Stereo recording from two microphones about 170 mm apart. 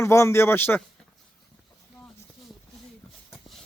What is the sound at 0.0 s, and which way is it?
Speech, 15° left (ahead or behind).